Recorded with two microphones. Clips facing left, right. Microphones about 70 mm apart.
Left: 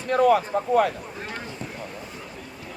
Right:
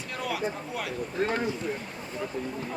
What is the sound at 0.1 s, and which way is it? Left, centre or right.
Speech, left.